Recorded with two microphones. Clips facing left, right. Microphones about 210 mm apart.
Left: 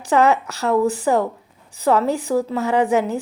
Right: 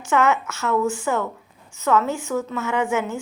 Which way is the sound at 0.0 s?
35° left (ahead or behind).